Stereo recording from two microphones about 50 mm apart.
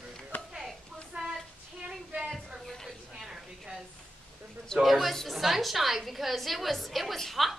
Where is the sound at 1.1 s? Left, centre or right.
Right.